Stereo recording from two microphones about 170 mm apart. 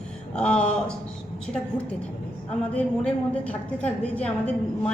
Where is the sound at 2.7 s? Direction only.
5° left (ahead or behind).